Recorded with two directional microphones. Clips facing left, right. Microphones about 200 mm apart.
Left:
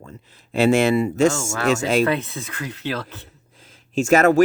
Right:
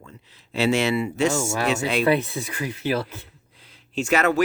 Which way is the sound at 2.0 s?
15° right (ahead or behind).